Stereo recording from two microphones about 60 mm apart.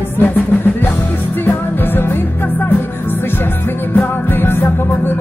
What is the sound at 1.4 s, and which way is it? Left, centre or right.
Music, left.